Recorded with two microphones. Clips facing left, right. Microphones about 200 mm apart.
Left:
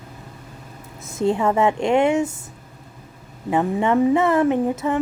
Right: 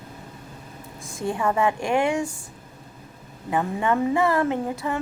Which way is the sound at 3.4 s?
20° left (ahead or behind).